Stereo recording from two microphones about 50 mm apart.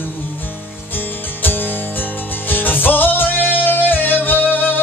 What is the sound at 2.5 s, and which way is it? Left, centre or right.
Music, left.